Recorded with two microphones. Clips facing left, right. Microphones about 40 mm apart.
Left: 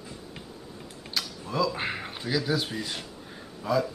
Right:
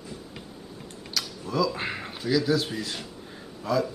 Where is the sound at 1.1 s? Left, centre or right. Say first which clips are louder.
Right 1 dB; centre.